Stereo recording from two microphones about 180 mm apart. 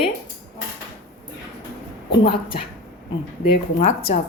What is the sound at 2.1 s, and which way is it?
Speech, 55° left (ahead or behind).